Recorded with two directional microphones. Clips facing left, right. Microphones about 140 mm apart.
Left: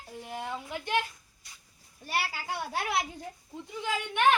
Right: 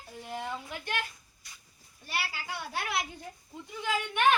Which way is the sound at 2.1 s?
45° left (ahead or behind).